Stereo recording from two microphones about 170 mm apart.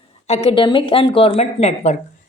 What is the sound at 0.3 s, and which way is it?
A woman's voice, 35° left (ahead or behind).